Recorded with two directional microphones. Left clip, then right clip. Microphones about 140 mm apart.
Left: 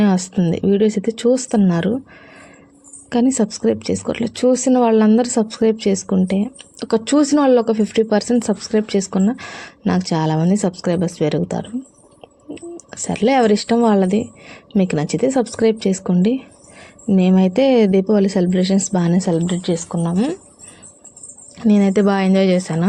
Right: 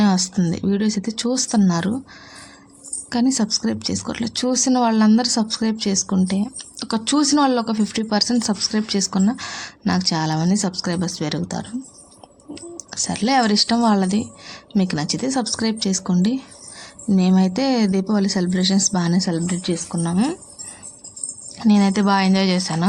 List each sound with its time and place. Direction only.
0.0 s speech: 30° left (ahead or behind)
3.1 s speech: 30° left (ahead or behind)
12.9 s speech: 25° left (ahead or behind)
21.6 s speech: 30° left (ahead or behind)